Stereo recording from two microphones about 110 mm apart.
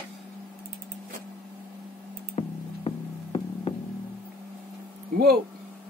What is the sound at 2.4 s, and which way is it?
Music, 65° left (ahead or behind).